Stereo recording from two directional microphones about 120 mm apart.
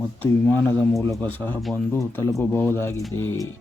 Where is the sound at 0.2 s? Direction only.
15° left (ahead or behind).